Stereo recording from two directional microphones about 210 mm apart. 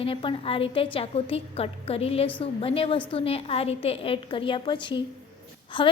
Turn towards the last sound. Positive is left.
turn(degrees=25)  # may be behind; listen again after turning